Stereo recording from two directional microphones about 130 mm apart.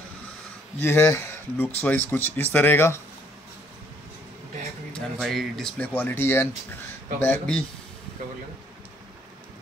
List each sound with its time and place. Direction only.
0.8 s speech: 20° left (ahead or behind)
4.9 s speech: centre (ahead or behind)
5.8 s speech: 15° left (ahead or behind)